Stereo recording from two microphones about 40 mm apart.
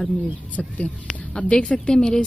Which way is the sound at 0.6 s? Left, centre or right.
Left.